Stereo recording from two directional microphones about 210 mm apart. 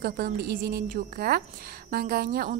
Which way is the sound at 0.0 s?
45° right (ahead or behind).